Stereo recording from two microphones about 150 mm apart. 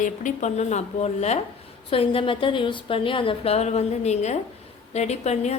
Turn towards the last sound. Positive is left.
turn(degrees=45)  # may be behind; listen again after turning